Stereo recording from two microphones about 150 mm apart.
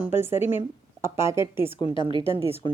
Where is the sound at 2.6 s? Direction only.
35° left (ahead or behind).